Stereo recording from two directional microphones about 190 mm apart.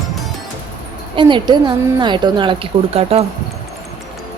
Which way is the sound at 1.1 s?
25° right (ahead or behind).